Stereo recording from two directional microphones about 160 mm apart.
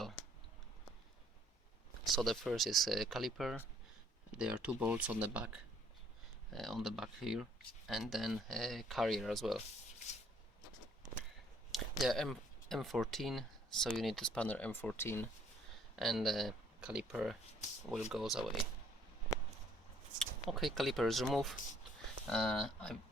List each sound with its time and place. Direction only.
2.0 s speech: centre (ahead or behind)
11.7 s speech: centre (ahead or behind); by 15.3 s 15° left (ahead or behind)
16.0 s speech: centre (ahead or behind)
20.1 s speech: centre (ahead or behind)